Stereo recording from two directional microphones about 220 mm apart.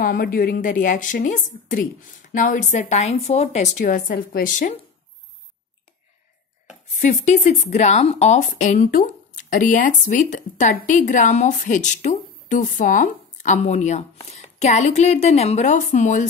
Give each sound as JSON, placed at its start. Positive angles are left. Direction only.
{"t": 0.0, "sound": "speech", "side_deg": 45}
{"t": 6.9, "sound": "speech", "side_deg": 30}